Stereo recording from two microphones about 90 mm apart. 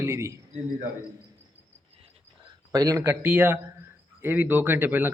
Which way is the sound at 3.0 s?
20° right (ahead or behind).